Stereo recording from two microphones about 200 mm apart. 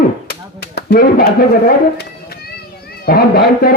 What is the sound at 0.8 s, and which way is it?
Speech, 45° left (ahead or behind).